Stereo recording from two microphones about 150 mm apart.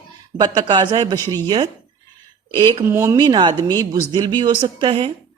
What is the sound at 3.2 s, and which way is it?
Speech, 30° right (ahead or behind).